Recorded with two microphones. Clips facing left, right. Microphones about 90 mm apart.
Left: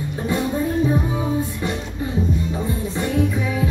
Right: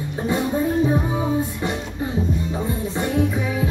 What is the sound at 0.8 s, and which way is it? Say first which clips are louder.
Music: even; 30° right (ahead or behind).